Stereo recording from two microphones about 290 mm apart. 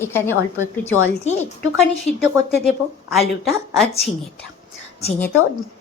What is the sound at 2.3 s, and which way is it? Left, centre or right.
Speech, centre.